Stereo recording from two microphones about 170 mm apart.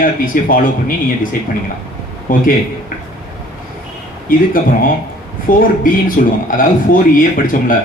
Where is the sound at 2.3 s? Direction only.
55° left (ahead or behind).